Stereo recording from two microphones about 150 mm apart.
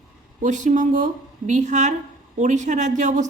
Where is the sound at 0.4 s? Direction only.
55° right (ahead or behind).